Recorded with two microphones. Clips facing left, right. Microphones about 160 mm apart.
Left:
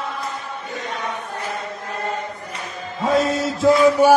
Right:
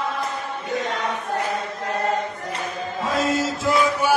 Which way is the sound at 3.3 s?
35° left (ahead or behind).